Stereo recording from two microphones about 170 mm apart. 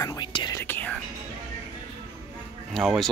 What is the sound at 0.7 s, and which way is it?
Whispering, 10° left (ahead or behind).